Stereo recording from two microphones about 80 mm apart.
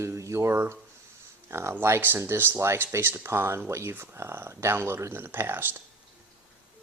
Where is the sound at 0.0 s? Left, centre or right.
Right.